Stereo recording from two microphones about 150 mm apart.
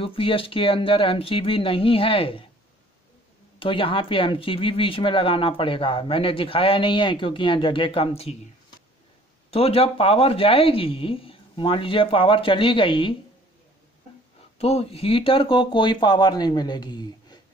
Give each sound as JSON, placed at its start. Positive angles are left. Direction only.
{"t": 0.0, "sound": "speech", "side_deg": 35}
{"t": 3.5, "sound": "speech", "side_deg": 35}
{"t": 9.5, "sound": "speech", "side_deg": 40}
{"t": 14.6, "sound": "speech", "side_deg": 45}